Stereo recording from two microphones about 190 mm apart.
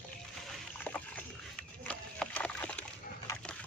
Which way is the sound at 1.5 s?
5° left (ahead or behind).